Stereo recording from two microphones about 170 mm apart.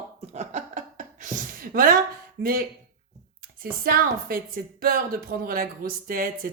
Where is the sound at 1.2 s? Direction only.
55° right (ahead or behind).